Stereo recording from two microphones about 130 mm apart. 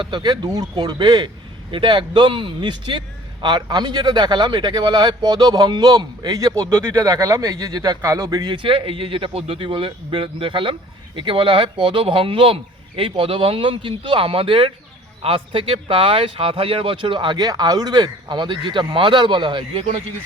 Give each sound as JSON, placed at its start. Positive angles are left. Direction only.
{"t": 0.0, "sound": "a man's voice", "side_deg": -35}